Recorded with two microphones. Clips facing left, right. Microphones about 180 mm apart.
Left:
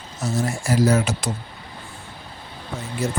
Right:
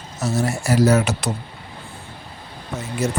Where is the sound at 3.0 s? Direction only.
75° right (ahead or behind).